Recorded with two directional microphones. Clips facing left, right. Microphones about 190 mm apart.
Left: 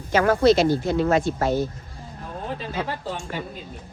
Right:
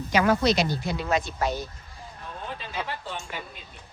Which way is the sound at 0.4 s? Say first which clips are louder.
Left 7 dB; 15° right (ahead or behind).